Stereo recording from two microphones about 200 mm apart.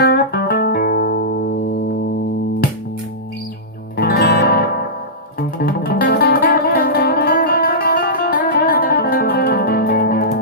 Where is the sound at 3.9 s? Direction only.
50° left (ahead or behind).